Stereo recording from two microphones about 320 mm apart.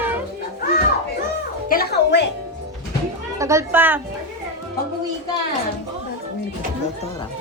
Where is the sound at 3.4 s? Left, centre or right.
Centre.